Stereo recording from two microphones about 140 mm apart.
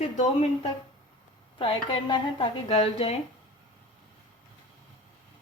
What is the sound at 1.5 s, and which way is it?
Speech, 40° left (ahead or behind).